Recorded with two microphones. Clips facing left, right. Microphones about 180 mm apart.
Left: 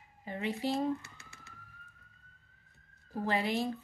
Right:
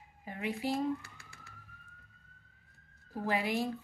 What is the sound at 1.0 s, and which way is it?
Police car, 20° left (ahead or behind).